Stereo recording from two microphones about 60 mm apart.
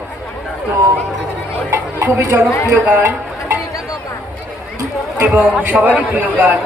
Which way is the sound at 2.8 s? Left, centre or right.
Right.